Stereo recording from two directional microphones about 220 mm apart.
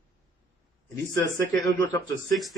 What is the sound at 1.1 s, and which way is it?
A man's voice, 15° left (ahead or behind).